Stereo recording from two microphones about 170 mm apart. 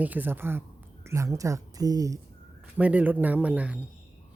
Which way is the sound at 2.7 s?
10° right (ahead or behind).